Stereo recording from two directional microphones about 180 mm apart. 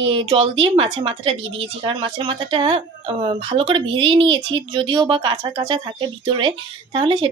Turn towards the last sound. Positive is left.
turn(degrees=-30)  # may be behind; listen again after turning